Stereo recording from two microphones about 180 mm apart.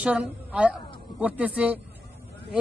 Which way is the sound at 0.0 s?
5° right (ahead or behind).